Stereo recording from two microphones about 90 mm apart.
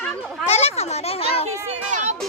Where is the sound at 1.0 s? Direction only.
90° left.